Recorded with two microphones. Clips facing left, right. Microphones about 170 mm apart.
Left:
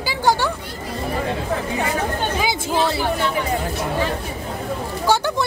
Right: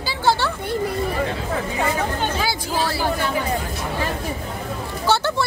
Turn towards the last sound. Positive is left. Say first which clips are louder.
# left 1 dB
turn(degrees=15)  # may be behind; listen again after turning